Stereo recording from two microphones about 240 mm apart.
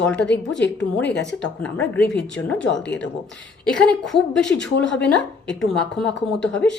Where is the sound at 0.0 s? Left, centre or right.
Centre.